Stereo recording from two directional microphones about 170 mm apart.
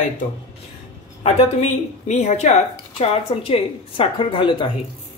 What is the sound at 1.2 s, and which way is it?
A woman's voice, 40° left (ahead or behind).